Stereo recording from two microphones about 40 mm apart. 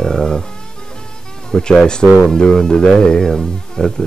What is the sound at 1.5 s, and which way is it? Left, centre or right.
Speech, centre.